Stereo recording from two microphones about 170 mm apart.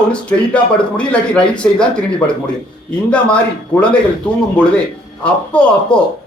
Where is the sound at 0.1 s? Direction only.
5° left (ahead or behind).